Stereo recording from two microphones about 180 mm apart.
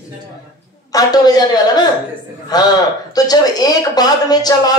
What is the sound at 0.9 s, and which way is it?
Speech, 20° left (ahead or behind).